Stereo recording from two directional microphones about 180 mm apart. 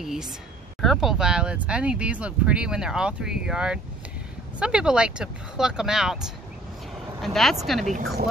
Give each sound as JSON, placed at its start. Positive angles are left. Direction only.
{"t": 0.0, "sound": "a woman's voice", "side_deg": -5}
{"t": 7.8, "sound": "speech", "side_deg": -45}